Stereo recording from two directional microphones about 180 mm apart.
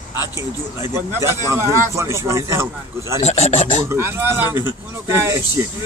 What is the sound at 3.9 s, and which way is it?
Speech, 15° right (ahead or behind).